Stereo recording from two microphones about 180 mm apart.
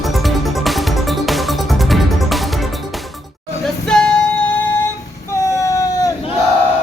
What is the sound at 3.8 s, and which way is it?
Music, 5° left (ahead or behind).